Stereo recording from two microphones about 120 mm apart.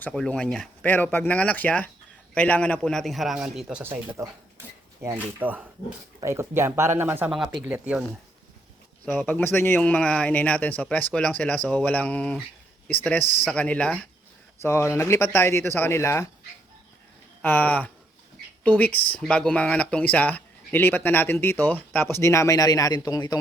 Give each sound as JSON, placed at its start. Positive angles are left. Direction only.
{"t": 0.0, "sound": "a man's voice", "side_deg": 5}
{"t": 7.3, "sound": "a man's voice", "side_deg": -5}
{"t": 9.1, "sound": "speech", "side_deg": 15}
{"t": 14.6, "sound": "speech", "side_deg": 20}
{"t": 17.4, "sound": "speech", "side_deg": 15}